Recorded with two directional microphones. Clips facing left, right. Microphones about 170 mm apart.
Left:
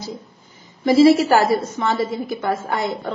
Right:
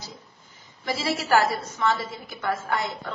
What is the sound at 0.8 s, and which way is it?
A woman's voice, 20° left (ahead or behind).